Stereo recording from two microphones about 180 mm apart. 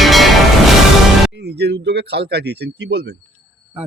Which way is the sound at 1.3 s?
65° right (ahead or behind).